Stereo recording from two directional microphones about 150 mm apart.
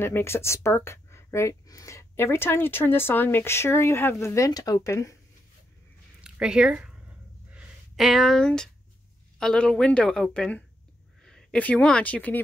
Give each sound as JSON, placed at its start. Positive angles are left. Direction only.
{"t": 0.0, "sound": "speech", "side_deg": 15}
{"t": 6.2, "sound": "speech", "side_deg": -5}
{"t": 7.5, "sound": "a sound", "side_deg": -5}
{"t": 9.4, "sound": "a woman's voice", "side_deg": 5}